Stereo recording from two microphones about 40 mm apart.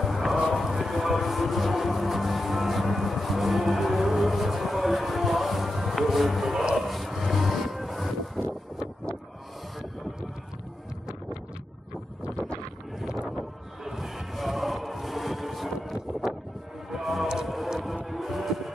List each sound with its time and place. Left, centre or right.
0.0 s music: centre
6.8 s a sound: centre
13.4 s music: centre